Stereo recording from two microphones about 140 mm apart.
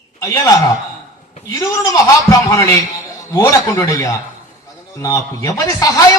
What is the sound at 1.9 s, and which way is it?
A man's voice, 25° left (ahead or behind).